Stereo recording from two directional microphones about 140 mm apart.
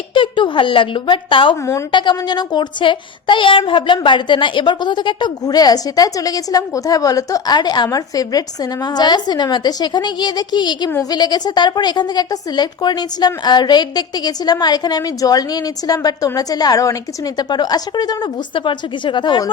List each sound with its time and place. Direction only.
0.1 s a woman's voice: 35° left (ahead or behind)